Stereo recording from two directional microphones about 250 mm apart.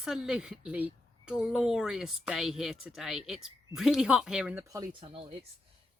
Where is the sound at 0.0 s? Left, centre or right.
Centre.